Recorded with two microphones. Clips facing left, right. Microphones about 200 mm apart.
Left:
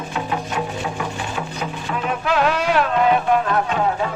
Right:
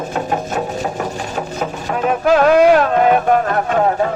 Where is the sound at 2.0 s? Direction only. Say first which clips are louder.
Right 8 dB; 45° right (ahead or behind).